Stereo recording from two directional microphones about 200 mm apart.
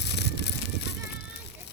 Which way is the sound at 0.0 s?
55° left (ahead or behind).